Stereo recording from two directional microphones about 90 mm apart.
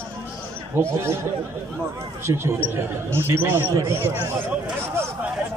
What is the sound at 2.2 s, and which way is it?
Speech, 30° right (ahead or behind).